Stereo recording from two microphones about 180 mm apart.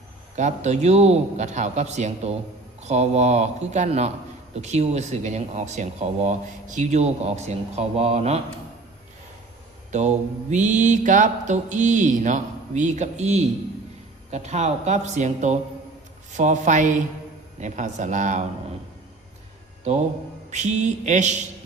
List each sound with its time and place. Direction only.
0.3 s speech: 40° right (ahead or behind)
9.9 s mantra: 40° right (ahead or behind)
14.3 s speech: 40° right (ahead or behind)
16.4 s mantra: 40° right (ahead or behind)
20.5 s speech: 40° right (ahead or behind)